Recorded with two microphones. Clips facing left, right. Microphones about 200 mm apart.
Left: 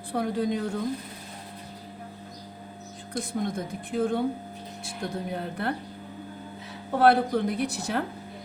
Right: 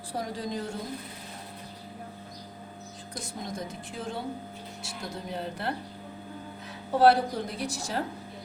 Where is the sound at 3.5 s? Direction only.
55° left (ahead or behind).